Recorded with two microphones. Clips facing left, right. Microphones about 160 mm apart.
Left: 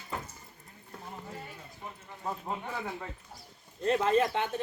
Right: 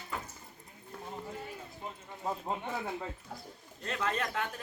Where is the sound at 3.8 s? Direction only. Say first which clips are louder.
Left 9 dB; 30° left (ahead or behind).